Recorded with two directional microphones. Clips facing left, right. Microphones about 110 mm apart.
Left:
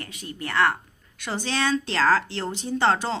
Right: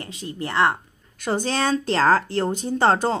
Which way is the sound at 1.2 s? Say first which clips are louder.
Right 4 dB; 40° right (ahead or behind).